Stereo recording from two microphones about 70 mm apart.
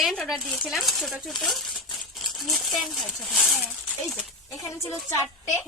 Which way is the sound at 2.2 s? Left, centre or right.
Centre.